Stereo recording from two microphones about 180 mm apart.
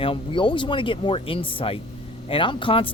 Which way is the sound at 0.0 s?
30° left (ahead or behind).